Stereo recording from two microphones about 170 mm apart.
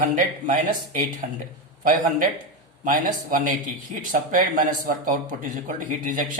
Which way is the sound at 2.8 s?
55° right (ahead or behind).